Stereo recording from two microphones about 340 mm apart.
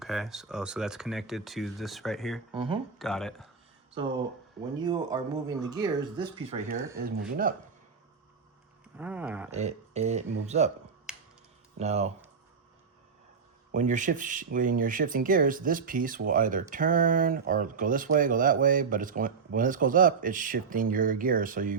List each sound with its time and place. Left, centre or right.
0.0 s speech: centre
2.5 s speech: centre
3.0 s speech: centre
4.9 s speech: centre
6.9 s speech: right
9.0 s speech: centre
9.5 s speech: centre
11.1 s finger snapping: centre
11.8 s speech: centre
13.7 s speech: right